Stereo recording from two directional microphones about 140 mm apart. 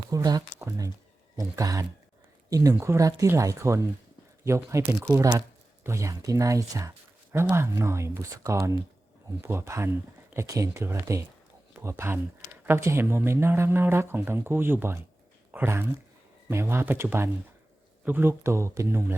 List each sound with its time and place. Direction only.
0.1 s speech: 25° right (ahead or behind)